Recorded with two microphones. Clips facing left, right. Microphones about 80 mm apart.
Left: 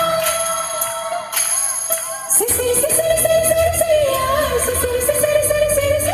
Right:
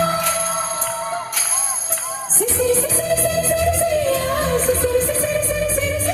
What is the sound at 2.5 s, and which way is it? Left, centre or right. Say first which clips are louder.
Music: left 1 dB; left.